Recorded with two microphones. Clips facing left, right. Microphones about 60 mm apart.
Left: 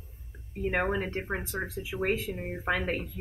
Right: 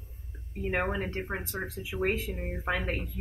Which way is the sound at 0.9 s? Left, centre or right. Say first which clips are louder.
Left 2 dB; centre.